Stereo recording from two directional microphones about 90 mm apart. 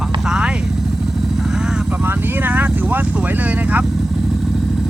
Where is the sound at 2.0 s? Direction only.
25° right (ahead or behind).